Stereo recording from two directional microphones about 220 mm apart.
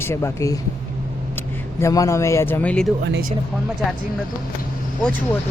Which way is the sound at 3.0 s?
45° right (ahead or behind).